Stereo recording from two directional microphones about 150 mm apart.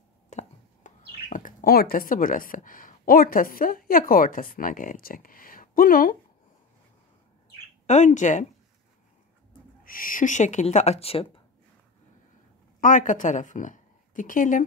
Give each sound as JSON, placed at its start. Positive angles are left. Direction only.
{"t": 0.3, "sound": "speech", "side_deg": 55}
{"t": 7.8, "sound": "speech", "side_deg": 50}
{"t": 9.8, "sound": "speech", "side_deg": 65}
{"t": 12.8, "sound": "a woman's voice", "side_deg": 60}